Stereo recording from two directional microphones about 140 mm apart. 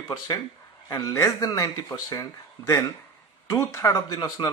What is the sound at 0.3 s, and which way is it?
Speech, 30° left (ahead or behind).